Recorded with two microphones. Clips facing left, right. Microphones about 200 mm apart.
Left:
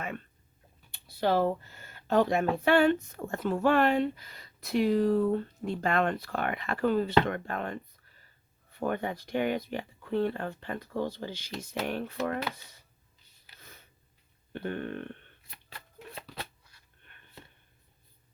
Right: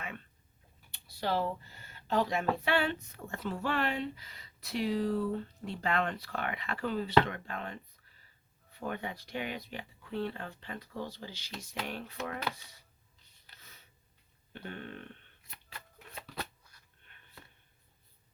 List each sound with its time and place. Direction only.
0.9 s speech: 55° left (ahead or behind)
13.6 s a sound: 50° left (ahead or behind)
14.5 s burping: 55° left (ahead or behind)
16.1 s shuffling cards: 30° left (ahead or behind)